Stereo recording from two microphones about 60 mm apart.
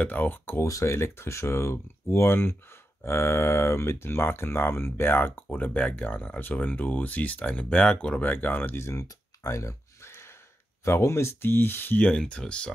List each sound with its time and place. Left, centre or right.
0.0 s speech: left
0.6 s speech: left
0.9 s speech: left
5.6 s speech: left
8.2 s speech: left
8.7 s speech: left
9.0 s a sound: left
10.9 s speech: left
12.0 s speech: centre